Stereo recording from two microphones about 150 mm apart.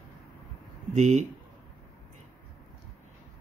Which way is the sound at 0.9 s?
50° right (ahead or behind).